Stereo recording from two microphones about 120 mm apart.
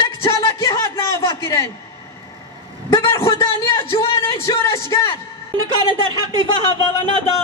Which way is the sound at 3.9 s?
50° left (ahead or behind).